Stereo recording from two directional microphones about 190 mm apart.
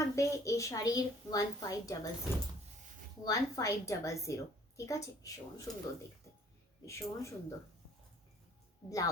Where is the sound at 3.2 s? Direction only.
15° left (ahead or behind).